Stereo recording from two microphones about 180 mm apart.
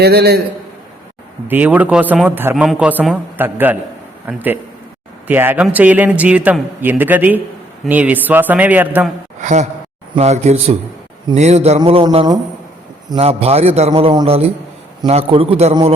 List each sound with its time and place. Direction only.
0.0 s a man's voice: 60° right (ahead or behind)
1.5 s a man's voice: 10° right (ahead or behind)
9.4 s a man's voice: 40° right (ahead or behind)